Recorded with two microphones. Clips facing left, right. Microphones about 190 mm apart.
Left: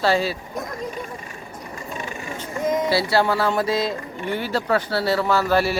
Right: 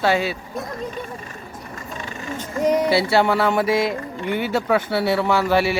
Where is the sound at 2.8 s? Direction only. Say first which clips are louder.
Right 2 dB; 20° right (ahead or behind).